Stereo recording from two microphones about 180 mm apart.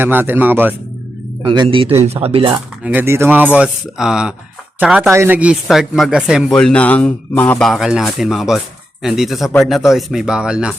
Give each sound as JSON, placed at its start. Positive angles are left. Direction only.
{"t": 0.0, "sound": "speech", "side_deg": -10}
{"t": 1.4, "sound": "speech", "side_deg": -25}
{"t": 2.5, "sound": "speech", "side_deg": -10}